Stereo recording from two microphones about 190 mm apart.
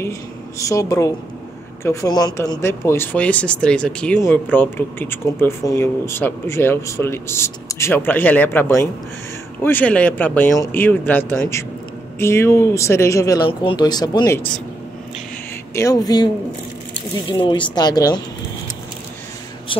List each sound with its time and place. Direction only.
0.6 s speech: 15° left (ahead or behind)
15.7 s speech: 15° left (ahead or behind)
17.3 s speech: 25° left (ahead or behind)
19.7 s a sound: 25° left (ahead or behind)